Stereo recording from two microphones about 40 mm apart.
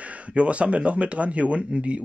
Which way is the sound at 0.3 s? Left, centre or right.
Right.